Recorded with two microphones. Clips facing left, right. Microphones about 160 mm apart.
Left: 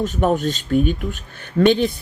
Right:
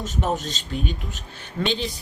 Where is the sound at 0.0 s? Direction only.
50° left (ahead or behind).